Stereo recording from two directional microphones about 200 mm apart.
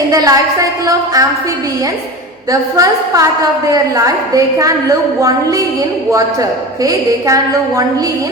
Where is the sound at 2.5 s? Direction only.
15° right (ahead or behind).